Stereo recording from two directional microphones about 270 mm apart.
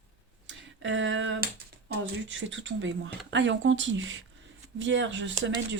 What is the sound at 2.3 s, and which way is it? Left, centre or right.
Speech, right.